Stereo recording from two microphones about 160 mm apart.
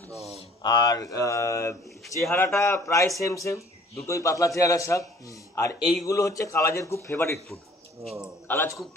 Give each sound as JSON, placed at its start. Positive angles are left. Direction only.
{"t": 0.6, "sound": "a man's voice", "side_deg": 25}
{"t": 6.0, "sound": "a man's voice", "side_deg": 20}
{"t": 8.0, "sound": "a man's voice", "side_deg": 0}
{"t": 8.5, "sound": "speech", "side_deg": 10}